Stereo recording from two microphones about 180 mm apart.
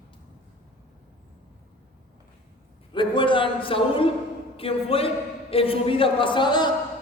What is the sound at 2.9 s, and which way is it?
A man's voice, 25° left (ahead or behind).